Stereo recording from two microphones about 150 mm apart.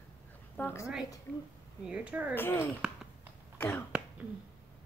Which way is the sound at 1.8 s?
10° right (ahead or behind).